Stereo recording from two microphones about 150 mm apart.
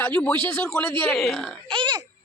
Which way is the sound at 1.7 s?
35° right (ahead or behind).